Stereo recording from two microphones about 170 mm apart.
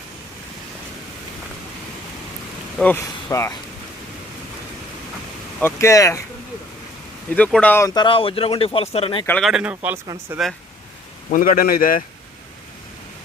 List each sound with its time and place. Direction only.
2.7 s speech: 10° left (ahead or behind)
5.6 s speech: 20° left (ahead or behind)
7.3 s speech: 10° left (ahead or behind); by 9.2 s 35° left (ahead or behind)
9.2 s speech: 10° left (ahead or behind)
9.5 s speech: 5° right (ahead or behind)
11.3 s speech: 55° left (ahead or behind)